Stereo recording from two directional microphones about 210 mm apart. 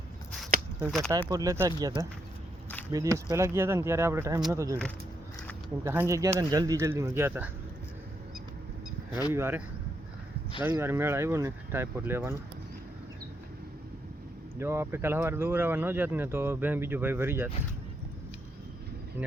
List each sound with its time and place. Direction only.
0.9 s speech: centre (ahead or behind)
1.3 s speech: 15° right (ahead or behind)
5.8 s speech: 10° right (ahead or behind)
9.3 s speech: 10° right (ahead or behind)
14.6 s speech: 10° right (ahead or behind)